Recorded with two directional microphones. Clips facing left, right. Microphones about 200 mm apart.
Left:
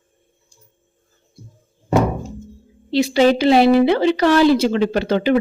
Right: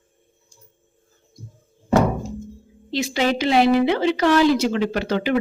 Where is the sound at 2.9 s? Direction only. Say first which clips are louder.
Left 7 dB; 35° left (ahead or behind).